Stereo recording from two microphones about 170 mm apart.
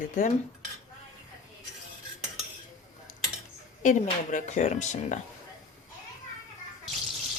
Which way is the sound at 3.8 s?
45° left (ahead or behind).